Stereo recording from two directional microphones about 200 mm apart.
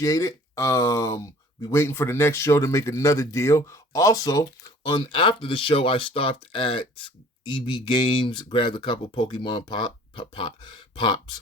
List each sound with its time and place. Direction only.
0.0 s speech: 15° left (ahead or behind)